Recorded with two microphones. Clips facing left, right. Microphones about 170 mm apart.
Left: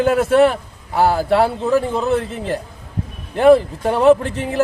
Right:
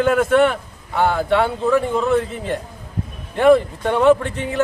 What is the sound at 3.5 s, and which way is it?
Speech, 30° left (ahead or behind).